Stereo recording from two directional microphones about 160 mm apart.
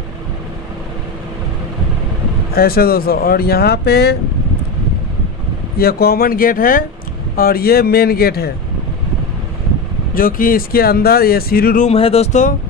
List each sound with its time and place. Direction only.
2.5 s speech: 70° left (ahead or behind); by 4.2 s 90° left
5.8 s speech: 75° left (ahead or behind)
7.3 s speech: 70° left (ahead or behind)
10.1 s speech: 60° left (ahead or behind)
11.9 s speech: 40° left (ahead or behind)